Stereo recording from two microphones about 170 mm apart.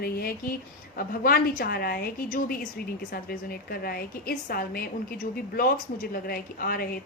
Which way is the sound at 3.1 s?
60° left (ahead or behind).